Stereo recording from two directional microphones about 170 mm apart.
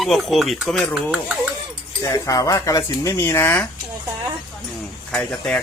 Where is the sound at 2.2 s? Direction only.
20° left (ahead or behind).